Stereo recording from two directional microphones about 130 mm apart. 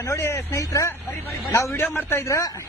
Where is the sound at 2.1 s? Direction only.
20° left (ahead or behind).